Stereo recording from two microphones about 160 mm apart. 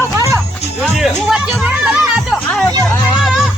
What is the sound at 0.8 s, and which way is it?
Music, centre (ahead or behind).